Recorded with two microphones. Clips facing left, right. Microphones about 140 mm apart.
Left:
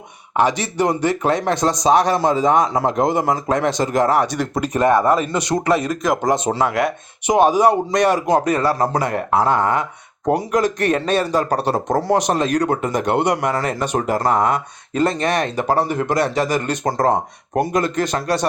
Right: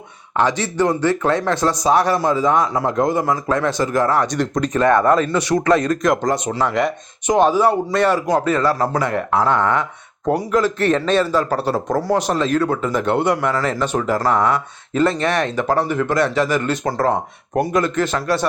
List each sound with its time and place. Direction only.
0.3 s speech: 10° left (ahead or behind)
5.7 s speech: 5° left (ahead or behind)
6.3 s speech: 25° left (ahead or behind)
6.7 s speech: 5° left (ahead or behind); by 17.7 s 20° left (ahead or behind)
17.7 s speech: 35° left (ahead or behind)
18.0 s speech: 15° left (ahead or behind)